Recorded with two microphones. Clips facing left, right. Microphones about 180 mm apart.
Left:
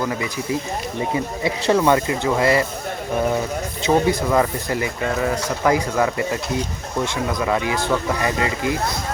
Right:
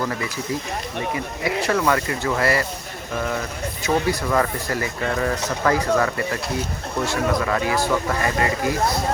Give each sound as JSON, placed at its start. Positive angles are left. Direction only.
{"t": 1.6, "sound": "speech", "side_deg": 25}
{"t": 3.8, "sound": "speech", "side_deg": 20}